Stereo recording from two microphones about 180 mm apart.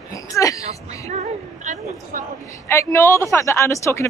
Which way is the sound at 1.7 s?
40° right (ahead or behind).